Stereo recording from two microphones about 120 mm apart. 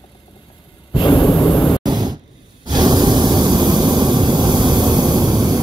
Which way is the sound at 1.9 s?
35° right (ahead or behind).